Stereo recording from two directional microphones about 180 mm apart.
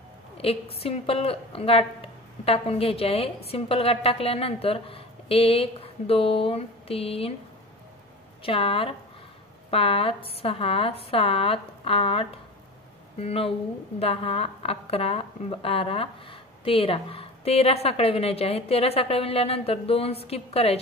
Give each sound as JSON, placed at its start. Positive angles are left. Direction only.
{"t": 0.4, "sound": "a woman's voice", "side_deg": 35}
{"t": 8.5, "sound": "a woman's voice", "side_deg": 30}